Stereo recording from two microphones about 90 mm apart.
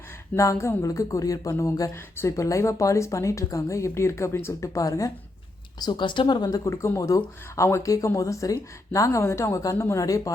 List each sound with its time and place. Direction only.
0.3 s speech: 35° left (ahead or behind)
5.8 s speech: 60° left (ahead or behind); by 10.3 s 40° left (ahead or behind)